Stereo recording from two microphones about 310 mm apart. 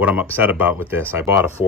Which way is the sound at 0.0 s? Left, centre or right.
Centre.